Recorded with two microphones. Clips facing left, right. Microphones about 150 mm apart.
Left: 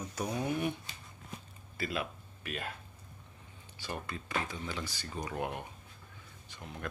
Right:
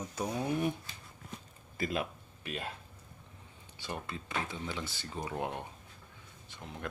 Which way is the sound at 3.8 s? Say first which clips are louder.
Even; 20° right (ahead or behind).